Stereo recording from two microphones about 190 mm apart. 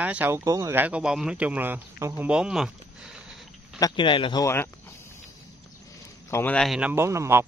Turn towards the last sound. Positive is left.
turn(degrees=-15)  # may be behind; listen again after turning